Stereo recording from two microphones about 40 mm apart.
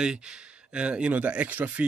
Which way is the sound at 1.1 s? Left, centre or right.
Right.